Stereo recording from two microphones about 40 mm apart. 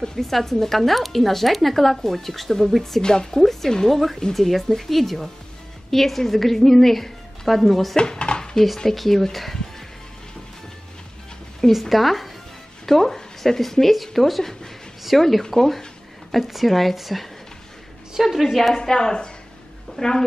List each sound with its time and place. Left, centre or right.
0.0 s speech: centre
3.0 s speech: centre
3.3 s speech: centre
7.9 s dishes: centre
8.7 s speech: centre
11.7 s speech: centre
18.8 s speech: centre